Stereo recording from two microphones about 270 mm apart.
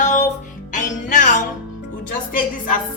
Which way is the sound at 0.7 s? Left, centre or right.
Left.